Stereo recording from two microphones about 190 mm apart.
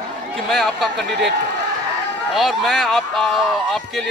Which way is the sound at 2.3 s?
Centre (ahead or behind).